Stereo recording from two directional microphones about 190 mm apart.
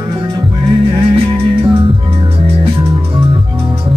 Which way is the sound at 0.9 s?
25° right (ahead or behind).